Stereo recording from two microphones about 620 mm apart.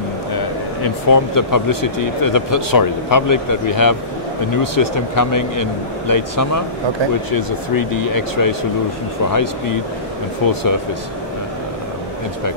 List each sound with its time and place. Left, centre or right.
0.8 s speech: left